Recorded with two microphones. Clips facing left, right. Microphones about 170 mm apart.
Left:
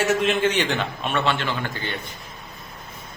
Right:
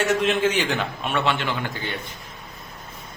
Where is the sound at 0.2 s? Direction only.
Centre (ahead or behind).